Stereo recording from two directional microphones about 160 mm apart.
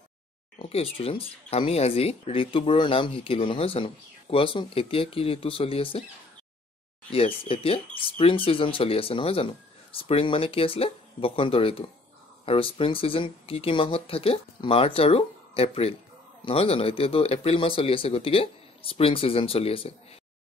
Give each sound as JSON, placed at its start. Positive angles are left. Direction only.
{"t": 0.6, "sound": "speech", "side_deg": 35}
{"t": 7.1, "sound": "speech", "side_deg": 35}